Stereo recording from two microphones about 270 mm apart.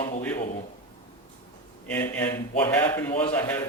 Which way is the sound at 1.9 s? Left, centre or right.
Centre.